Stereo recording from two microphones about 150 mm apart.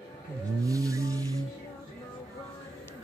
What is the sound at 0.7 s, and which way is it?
Vehicle, 20° right (ahead or behind).